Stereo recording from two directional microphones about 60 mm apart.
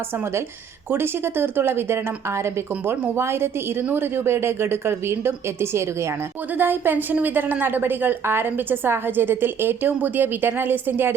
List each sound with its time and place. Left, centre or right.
0.9 s a woman's voice: right
2.9 s a woman's voice: right
3.2 s a woman's voice: right
6.6 s a woman's voice: right